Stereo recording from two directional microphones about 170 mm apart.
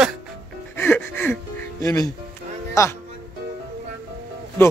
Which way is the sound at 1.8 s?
20° left (ahead or behind).